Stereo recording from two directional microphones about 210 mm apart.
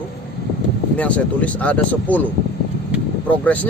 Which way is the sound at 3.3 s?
5° left (ahead or behind).